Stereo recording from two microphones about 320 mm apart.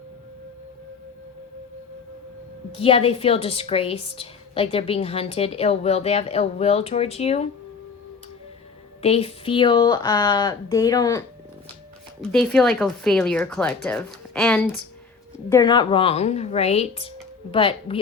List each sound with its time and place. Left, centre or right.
2.7 s a woman's voice: centre
9.0 s speech: centre
12.2 s a woman's voice: centre